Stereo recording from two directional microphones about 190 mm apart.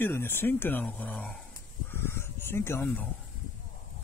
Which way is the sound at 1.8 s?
10° left (ahead or behind).